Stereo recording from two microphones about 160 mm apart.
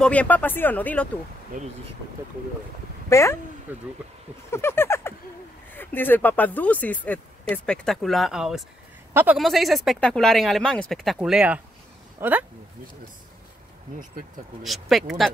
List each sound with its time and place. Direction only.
0.0 s speech: 10° left (ahead or behind)
1.5 s speech: 55° right (ahead or behind)
3.1 s speech: 15° left (ahead or behind)
3.7 s speech: 10° right (ahead or behind)
4.5 s a sound: 15° left (ahead or behind)
5.7 s speech: 10° left (ahead or behind); by 9.4 s 10° right (ahead or behind)
9.4 s speech: centre (ahead or behind)
14.6 s speech: centre (ahead or behind)